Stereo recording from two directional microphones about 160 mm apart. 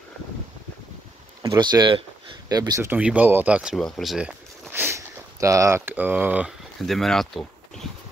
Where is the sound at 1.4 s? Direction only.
25° right (ahead or behind).